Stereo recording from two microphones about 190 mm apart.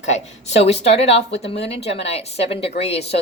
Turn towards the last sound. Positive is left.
turn(degrees=30)  # may be behind; listen again after turning